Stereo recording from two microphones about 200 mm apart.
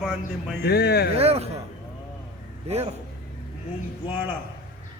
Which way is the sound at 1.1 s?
30° right (ahead or behind).